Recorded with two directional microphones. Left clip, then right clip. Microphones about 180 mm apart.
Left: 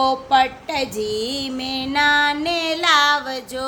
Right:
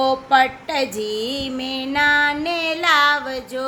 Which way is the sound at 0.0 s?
Centre (ahead or behind).